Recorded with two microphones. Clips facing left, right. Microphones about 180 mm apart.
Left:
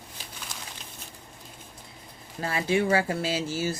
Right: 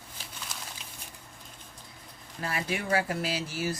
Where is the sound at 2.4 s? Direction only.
25° left (ahead or behind).